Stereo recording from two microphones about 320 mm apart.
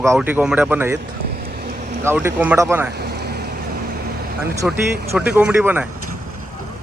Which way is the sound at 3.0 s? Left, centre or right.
Right.